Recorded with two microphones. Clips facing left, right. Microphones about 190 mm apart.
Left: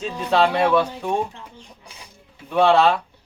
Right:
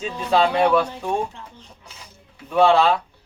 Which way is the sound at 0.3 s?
5° left (ahead or behind).